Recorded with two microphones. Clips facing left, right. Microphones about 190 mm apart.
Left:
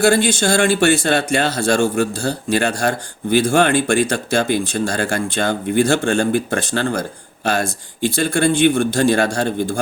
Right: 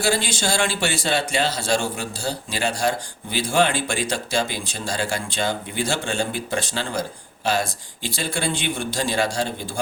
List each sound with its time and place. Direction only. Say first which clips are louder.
0.0 s speech: left 8 dB; 55° left (ahead or behind)
8.0 s speech: left 9 dB; 50° left (ahead or behind)